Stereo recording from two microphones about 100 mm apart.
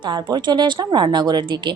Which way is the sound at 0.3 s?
45° right (ahead or behind).